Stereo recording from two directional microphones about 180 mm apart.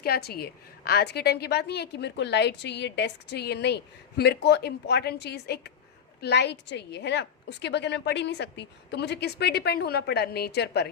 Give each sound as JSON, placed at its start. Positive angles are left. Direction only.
{"t": 0.0, "sound": "a woman's voice", "side_deg": 60}